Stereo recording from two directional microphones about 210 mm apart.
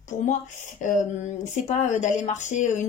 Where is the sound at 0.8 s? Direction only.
35° left (ahead or behind).